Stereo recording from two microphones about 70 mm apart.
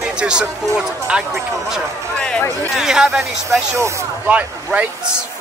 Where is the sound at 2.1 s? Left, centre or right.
Centre.